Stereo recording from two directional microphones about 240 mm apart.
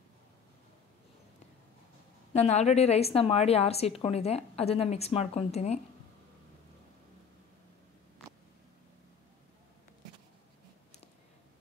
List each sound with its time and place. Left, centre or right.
2.3 s a woman's voice: left